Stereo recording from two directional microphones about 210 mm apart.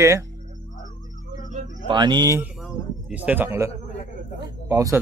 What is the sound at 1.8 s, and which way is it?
Speech, 20° right (ahead or behind).